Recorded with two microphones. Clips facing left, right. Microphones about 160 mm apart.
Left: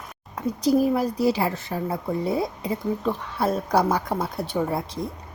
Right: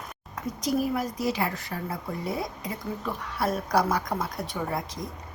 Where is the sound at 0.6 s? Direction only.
30° left (ahead or behind).